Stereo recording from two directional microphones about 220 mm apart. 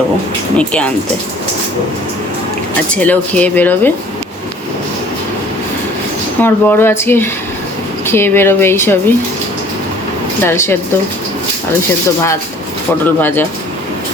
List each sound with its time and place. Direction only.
0.5 s speech: 5° left (ahead or behind)
2.9 s speech: 5° left (ahead or behind)
6.4 s speech: 10° left (ahead or behind)
10.4 s speech: 10° left (ahead or behind)
13.1 s speech: 10° left (ahead or behind)